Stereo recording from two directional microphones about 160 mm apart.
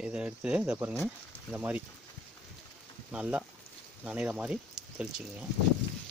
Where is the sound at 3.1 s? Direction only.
5° right (ahead or behind).